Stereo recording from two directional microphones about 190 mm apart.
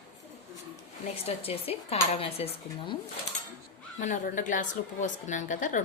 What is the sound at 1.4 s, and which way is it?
Speech, 30° left (ahead or behind).